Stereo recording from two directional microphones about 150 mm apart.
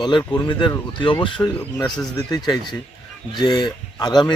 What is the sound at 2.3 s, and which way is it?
Speech, 25° left (ahead or behind).